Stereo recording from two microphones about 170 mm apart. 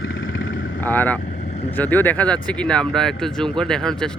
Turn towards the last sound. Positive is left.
turn(degrees=5)  # may be behind; listen again after turning